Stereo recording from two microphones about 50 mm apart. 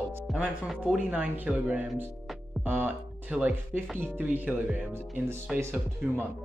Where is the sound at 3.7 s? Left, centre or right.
Right.